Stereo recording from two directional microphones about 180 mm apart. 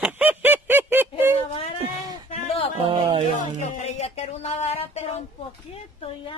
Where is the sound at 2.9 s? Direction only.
30° right (ahead or behind).